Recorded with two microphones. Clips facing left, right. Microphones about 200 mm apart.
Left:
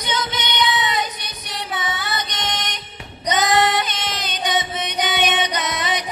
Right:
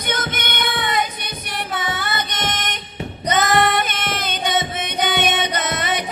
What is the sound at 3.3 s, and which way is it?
Singing, 55° right (ahead or behind).